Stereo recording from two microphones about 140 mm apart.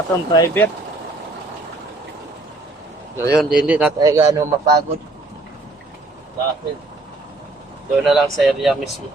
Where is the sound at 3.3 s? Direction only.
5° right (ahead or behind).